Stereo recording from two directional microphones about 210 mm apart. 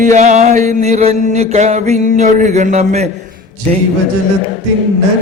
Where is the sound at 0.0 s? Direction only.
35° right (ahead or behind).